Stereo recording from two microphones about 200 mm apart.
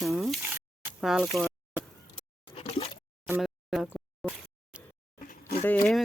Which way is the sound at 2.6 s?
30° left (ahead or behind).